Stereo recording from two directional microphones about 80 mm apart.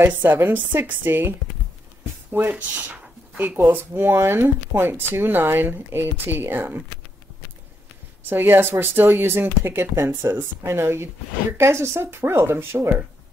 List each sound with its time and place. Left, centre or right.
0.0 s speech: right
2.3 s speech: centre
8.3 s speech: right